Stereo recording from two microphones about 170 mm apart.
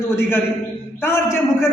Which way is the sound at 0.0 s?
15° left (ahead or behind).